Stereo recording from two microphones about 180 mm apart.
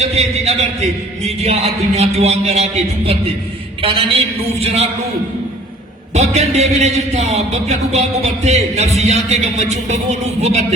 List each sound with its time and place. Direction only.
0.0 s a man's voice: 35° right (ahead or behind)
6.1 s a man's voice: 40° right (ahead or behind)